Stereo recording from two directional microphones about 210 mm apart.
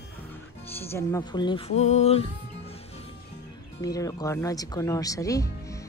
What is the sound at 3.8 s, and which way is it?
Speech, 15° left (ahead or behind).